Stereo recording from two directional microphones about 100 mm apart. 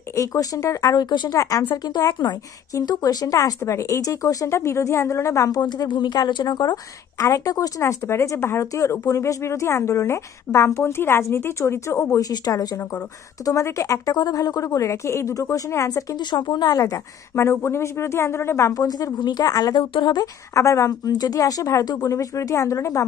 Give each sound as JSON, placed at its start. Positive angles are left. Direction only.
{"t": 0.1, "sound": "speech", "side_deg": 35}
{"t": 1.3, "sound": "speech", "side_deg": 35}
{"t": 2.0, "sound": "speech", "side_deg": 45}
{"t": 5.6, "sound": "a woman's voice", "side_deg": 50}
{"t": 12.3, "sound": "speech", "side_deg": 40}
{"t": 14.1, "sound": "speech", "side_deg": 40}
{"t": 16.3, "sound": "a woman's voice", "side_deg": 50}
{"t": 18.7, "sound": "speech", "side_deg": 35}
{"t": 19.8, "sound": "speech", "side_deg": 55}
{"t": 20.5, "sound": "speech", "side_deg": 30}